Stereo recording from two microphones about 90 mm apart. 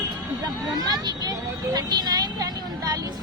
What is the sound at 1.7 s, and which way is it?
Vehicle, 45° right (ahead or behind).